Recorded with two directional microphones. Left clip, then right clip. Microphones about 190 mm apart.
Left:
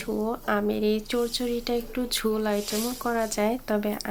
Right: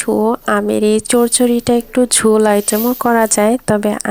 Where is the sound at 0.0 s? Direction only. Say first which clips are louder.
Right 14 dB; 45° right (ahead or behind).